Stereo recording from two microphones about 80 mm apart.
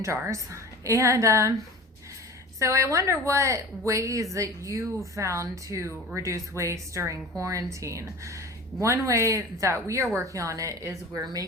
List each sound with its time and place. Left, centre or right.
0.0 s a woman's voice: right
2.6 s a woman's voice: right